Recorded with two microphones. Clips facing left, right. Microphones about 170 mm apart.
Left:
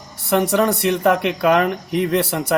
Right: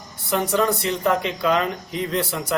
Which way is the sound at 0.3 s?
65° left (ahead or behind).